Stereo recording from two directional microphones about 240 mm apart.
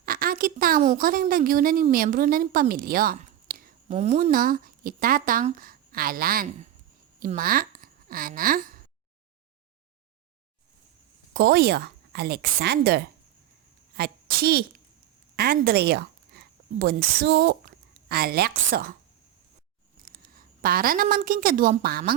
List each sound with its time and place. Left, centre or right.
0.0 s a woman's voice: right
11.3 s a woman's voice: right
20.1 s a woman's voice: right